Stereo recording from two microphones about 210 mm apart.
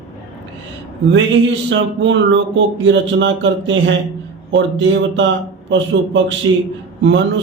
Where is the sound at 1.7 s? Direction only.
60° right (ahead or behind).